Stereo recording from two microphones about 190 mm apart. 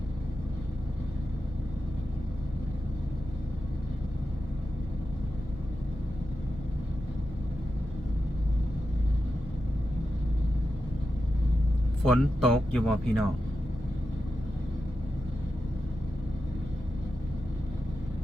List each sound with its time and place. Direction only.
12.1 s speech: centre (ahead or behind)